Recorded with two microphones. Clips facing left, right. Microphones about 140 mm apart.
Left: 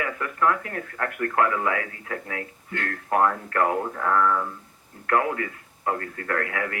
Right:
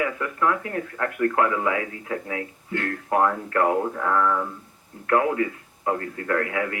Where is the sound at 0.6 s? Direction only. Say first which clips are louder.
Right 3 dB; 25° right (ahead or behind).